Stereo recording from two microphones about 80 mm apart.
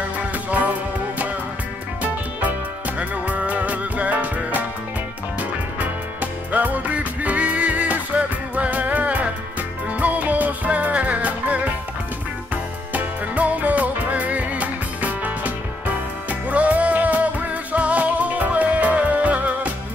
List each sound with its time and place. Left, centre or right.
0.5 s music: centre
3.0 s music: centre
6.5 s music: centre
12.9 s music: centre